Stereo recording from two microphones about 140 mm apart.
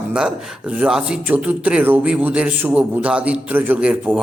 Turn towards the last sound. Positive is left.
turn(degrees=-10)  # may be behind; listen again after turning